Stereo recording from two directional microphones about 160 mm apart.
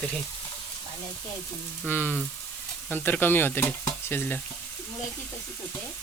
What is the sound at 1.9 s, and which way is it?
Frying, 10° left (ahead or behind).